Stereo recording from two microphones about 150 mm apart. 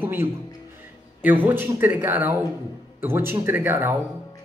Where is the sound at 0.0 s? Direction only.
15° right (ahead or behind).